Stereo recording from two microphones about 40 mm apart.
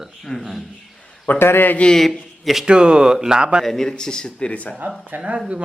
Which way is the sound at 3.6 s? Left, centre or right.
Centre.